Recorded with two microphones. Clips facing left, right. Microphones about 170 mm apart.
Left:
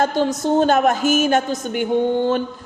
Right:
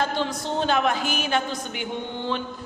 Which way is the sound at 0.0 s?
45° left (ahead or behind).